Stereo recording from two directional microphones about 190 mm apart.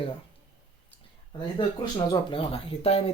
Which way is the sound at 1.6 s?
25° left (ahead or behind).